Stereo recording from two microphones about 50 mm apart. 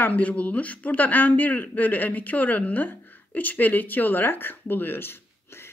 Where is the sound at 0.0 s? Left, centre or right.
Left.